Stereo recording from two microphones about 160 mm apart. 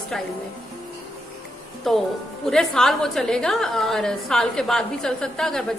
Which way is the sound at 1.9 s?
Centre (ahead or behind).